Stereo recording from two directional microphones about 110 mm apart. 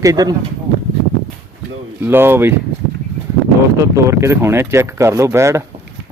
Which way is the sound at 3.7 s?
30° right (ahead or behind).